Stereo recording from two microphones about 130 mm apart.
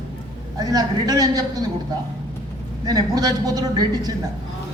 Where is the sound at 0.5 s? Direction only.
30° right (ahead or behind).